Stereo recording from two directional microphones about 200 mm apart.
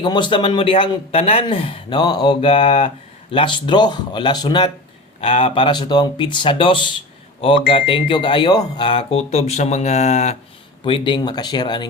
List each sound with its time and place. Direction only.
0.0 s speech: 25° left (ahead or behind)